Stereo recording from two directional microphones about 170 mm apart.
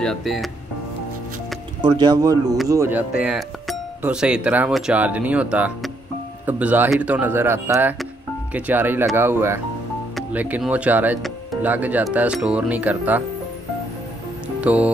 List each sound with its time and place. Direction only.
0.0 s speech: centre (ahead or behind)
1.8 s speech: 25° right (ahead or behind)
3.2 s speech: 5° right (ahead or behind)
14.6 s speech: 10° right (ahead or behind)